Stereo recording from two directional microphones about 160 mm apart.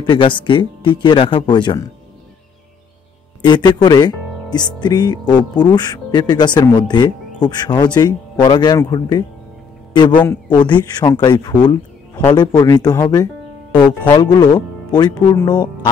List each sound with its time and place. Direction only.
0.0 s speech: 30° left (ahead or behind)
3.4 s speech: 30° left (ahead or behind)